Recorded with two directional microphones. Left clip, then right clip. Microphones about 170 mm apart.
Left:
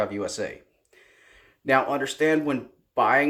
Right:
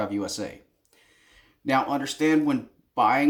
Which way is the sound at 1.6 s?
30° left (ahead or behind).